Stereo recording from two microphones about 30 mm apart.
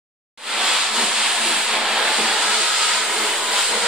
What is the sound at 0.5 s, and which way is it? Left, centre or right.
Hiss, centre.